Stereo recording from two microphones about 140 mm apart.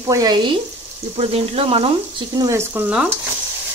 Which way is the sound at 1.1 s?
45° right (ahead or behind).